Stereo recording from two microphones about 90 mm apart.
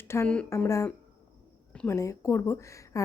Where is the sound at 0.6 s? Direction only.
30° left (ahead or behind).